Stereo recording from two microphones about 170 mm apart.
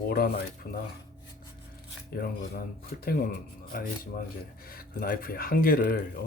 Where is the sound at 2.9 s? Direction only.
60° left (ahead or behind).